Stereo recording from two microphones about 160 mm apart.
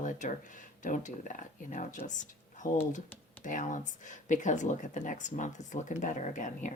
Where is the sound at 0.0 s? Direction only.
50° left (ahead or behind).